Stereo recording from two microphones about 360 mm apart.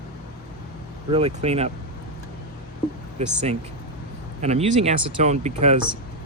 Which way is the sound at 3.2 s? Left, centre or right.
Centre.